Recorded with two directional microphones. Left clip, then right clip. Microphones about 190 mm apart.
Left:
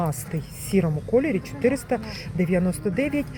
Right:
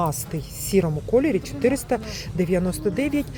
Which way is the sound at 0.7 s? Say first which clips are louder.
Right 2 dB; 10° right (ahead or behind).